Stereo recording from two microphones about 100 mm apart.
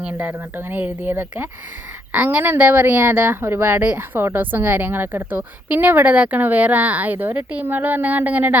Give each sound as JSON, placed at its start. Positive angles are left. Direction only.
{"t": 0.0, "sound": "speech", "side_deg": -15}